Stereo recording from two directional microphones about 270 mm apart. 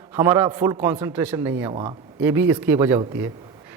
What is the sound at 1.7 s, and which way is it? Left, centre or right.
Speech, centre.